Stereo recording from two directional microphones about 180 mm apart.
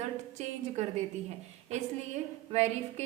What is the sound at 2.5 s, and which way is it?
Speech, 40° right (ahead or behind).